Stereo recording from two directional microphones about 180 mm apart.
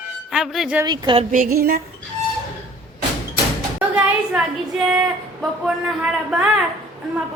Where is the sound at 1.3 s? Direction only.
50° right (ahead or behind).